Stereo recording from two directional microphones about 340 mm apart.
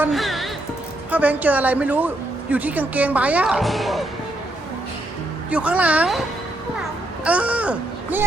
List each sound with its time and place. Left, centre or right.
0.0 s music: centre
1.1 s a woman's voice: centre
5.5 s a woman's voice: centre
7.3 s a child's voice: centre